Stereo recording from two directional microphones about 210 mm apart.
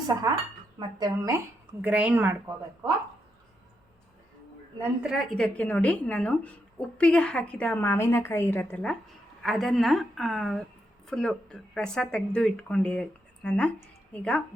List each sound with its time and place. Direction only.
0.8 s speech: 20° right (ahead or behind)
1.8 s speech: 5° right (ahead or behind)
4.8 s a woman's voice: centre (ahead or behind)